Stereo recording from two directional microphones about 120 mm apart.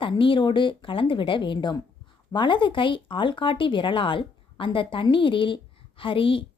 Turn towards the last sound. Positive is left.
turn(degrees=50)  # may be behind; listen again after turning